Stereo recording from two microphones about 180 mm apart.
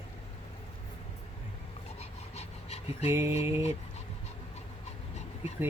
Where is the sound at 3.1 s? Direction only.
15° right (ahead or behind).